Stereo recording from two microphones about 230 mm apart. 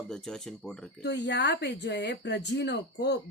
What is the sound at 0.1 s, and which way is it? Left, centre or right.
Speech, centre.